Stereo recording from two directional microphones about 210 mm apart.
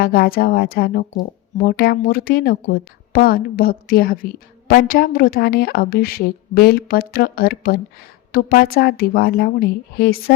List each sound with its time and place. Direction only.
0.0 s a woman's voice: 45° left (ahead or behind)